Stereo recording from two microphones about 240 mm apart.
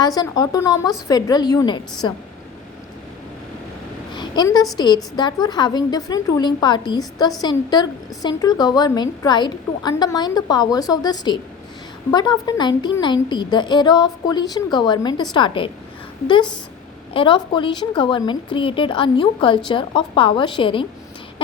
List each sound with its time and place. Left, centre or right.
0.0 s a woman's voice: centre
4.1 s a sound: centre
5.1 s a woman's voice: centre